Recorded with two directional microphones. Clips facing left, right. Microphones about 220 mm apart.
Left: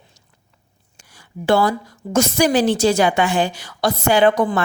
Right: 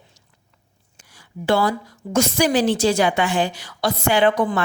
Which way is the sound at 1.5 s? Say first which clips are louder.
Left 3 dB; 50° left (ahead or behind).